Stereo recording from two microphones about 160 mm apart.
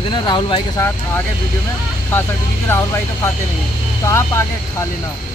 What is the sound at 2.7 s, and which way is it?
Speech, 15° left (ahead or behind).